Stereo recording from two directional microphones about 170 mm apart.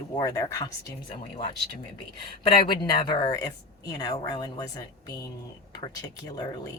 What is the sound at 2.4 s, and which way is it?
Speech, 25° left (ahead or behind).